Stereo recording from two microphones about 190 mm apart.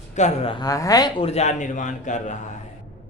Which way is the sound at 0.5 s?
20° left (ahead or behind).